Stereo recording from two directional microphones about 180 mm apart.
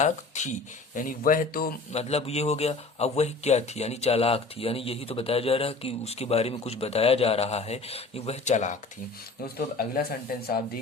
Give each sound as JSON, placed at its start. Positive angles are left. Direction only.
{"t": 0.0, "sound": "speech", "side_deg": 40}
{"t": 1.9, "sound": "speech", "side_deg": 35}
{"t": 9.6, "sound": "speech", "side_deg": 55}